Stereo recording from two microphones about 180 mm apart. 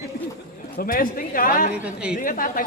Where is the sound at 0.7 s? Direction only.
55° left (ahead or behind).